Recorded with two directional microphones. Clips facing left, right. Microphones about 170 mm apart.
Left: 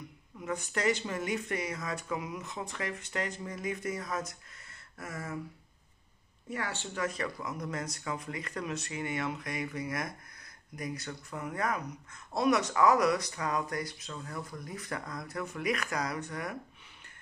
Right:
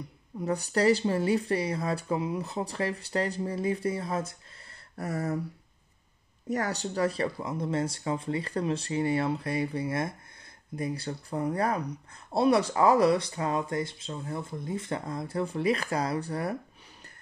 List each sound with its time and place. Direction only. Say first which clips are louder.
0.4 s speech: right 7 dB; 35° right (ahead or behind)
6.5 s speech: right 7 dB; 40° right (ahead or behind)